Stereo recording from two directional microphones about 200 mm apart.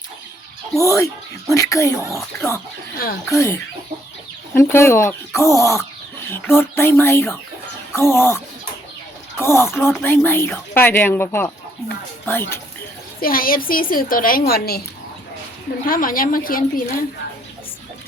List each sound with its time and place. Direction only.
0.9 s speech: 15° left (ahead or behind)
2.0 s speech: centre (ahead or behind)
3.2 s speech: 15° left (ahead or behind)
9.4 s speech: 15° left (ahead or behind)
13.2 s a woman's voice: 45° left (ahead or behind)
15.9 s a woman's voice: 45° left (ahead or behind)